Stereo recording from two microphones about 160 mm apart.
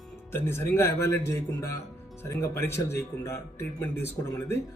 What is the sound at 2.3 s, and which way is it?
Speech, 15° left (ahead or behind).